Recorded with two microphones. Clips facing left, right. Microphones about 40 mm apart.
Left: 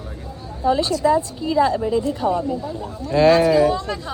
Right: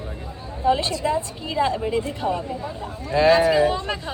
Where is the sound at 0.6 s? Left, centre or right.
Right.